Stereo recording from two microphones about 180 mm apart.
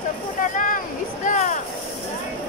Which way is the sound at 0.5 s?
45° left (ahead or behind).